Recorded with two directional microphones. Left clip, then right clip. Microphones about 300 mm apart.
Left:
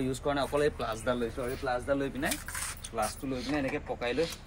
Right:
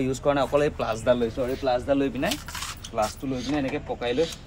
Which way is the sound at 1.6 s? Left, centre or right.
Right.